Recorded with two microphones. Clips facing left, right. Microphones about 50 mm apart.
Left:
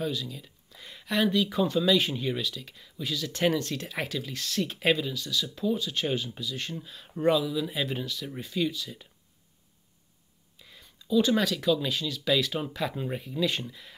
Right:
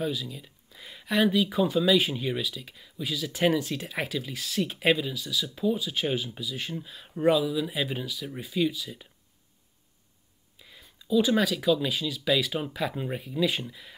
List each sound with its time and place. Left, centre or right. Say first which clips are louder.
0.0 s speech: right 1 dB; centre
10.6 s speech: right 1 dB; centre